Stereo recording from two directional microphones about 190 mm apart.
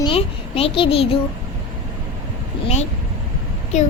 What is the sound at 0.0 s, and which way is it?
A child's voice, 30° left (ahead or behind).